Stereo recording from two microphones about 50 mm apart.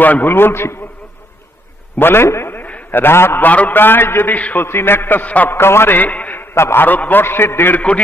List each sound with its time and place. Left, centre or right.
0.0 s a man's voice: left
0.3 s a man's voice: left
2.0 s a man's voice: left
2.5 s a sound: left
3.4 s a man's voice: left
5.2 s a man's voice: left
5.5 s a man's voice: left
5.9 s a man's voice: left
6.5 s a man's voice: left
6.9 s a man's voice: left